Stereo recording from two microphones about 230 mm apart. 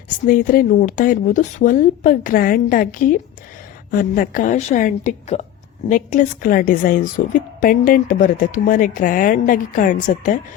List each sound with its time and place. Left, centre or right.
0.3 s a woman's voice: left